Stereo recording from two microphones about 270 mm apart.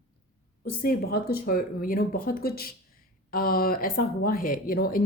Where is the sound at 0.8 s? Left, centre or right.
Left.